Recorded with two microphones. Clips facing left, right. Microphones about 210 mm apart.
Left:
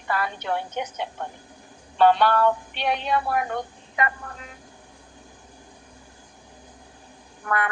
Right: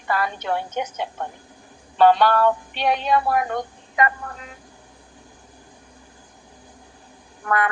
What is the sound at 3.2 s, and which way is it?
Speech, 90° right.